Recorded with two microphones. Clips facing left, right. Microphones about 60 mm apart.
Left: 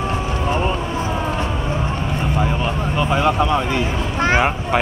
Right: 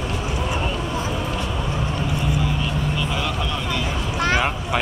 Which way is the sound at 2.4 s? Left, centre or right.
Left.